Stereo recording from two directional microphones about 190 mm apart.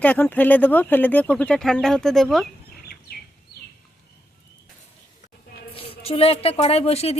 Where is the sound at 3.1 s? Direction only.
55° left (ahead or behind).